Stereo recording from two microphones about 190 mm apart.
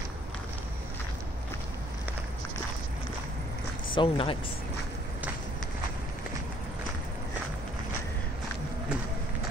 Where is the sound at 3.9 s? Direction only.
25° left (ahead or behind).